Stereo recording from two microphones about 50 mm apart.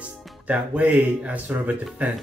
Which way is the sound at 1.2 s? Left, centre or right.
Right.